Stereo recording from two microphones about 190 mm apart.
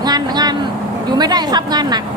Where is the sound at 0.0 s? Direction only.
20° right (ahead or behind).